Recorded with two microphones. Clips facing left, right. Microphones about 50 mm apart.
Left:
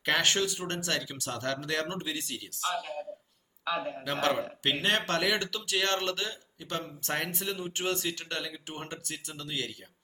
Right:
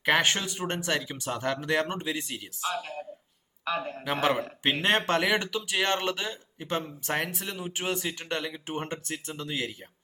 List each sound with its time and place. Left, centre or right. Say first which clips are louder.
0.0 s speech: right 2 dB; centre
4.0 s speech: right 3 dB; centre
4.8 s speech: right 4 dB; right
7.0 s speech: right 2 dB; centre
8.3 s speech: right 5 dB; right